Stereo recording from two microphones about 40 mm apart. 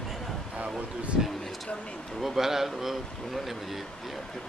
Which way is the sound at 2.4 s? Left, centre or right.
Centre.